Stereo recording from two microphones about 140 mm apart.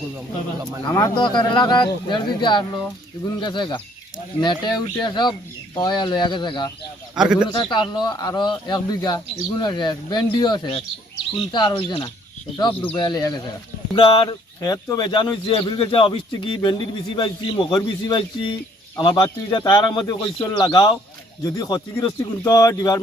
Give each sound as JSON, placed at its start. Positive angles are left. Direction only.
{"t": 0.9, "sound": "speech", "side_deg": 30}
{"t": 7.2, "sound": "speech", "side_deg": -5}
{"t": 7.5, "sound": "speech", "side_deg": 35}